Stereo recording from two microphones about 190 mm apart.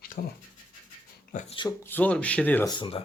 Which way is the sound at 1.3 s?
45° left (ahead or behind).